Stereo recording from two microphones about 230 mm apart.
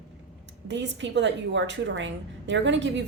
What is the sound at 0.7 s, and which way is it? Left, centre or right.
A woman's voice, right.